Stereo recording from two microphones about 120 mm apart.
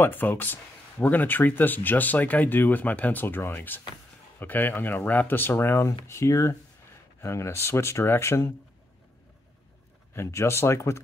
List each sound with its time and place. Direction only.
0.0 s speech: 15° left (ahead or behind)
10.1 s speech: 25° left (ahead or behind)